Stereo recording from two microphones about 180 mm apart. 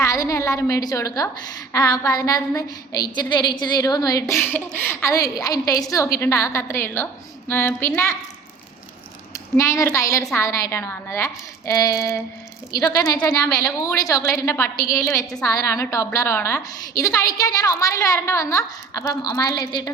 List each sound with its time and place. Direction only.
0.0 s a woman's voice: 20° left (ahead or behind)
9.3 s a woman's voice: 20° left (ahead or behind)